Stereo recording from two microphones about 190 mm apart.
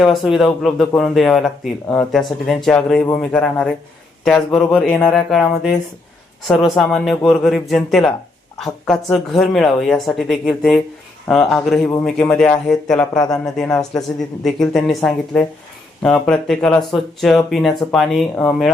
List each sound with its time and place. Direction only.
0.0 s speech: centre (ahead or behind)
13.1 s a man's voice: 20° left (ahead or behind)
14.4 s speech: centre (ahead or behind)